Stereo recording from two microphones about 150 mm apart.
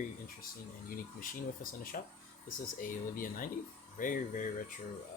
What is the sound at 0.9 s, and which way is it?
Speech, 65° left (ahead or behind).